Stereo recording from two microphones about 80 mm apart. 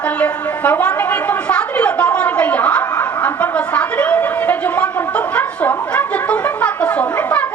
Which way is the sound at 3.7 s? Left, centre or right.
Centre.